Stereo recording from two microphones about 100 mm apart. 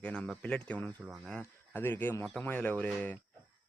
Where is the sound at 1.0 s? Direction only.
Centre (ahead or behind).